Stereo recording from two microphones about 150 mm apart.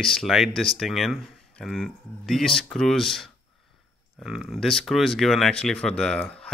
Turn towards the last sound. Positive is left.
turn(degrees=5)  # may be behind; listen again after turning